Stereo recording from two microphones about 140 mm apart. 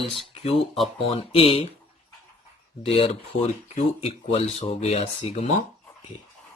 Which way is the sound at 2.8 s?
45° left (ahead or behind).